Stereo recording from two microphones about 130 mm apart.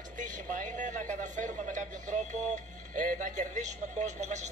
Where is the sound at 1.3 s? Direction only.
75° right (ahead or behind).